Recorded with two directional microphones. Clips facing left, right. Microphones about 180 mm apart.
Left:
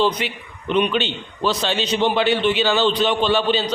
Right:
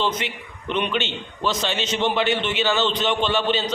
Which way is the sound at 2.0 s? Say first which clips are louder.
Left 2 dB; 15° left (ahead or behind).